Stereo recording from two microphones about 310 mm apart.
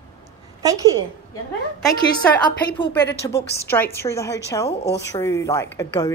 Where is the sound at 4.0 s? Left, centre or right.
Centre.